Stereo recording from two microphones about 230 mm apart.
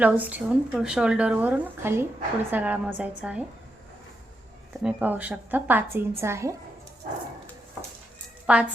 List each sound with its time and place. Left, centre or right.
0.0 s a woman's voice: centre
4.8 s a woman's voice: centre
8.5 s speech: centre